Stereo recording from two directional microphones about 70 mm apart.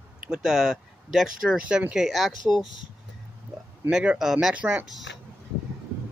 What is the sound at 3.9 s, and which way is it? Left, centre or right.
Speech, centre.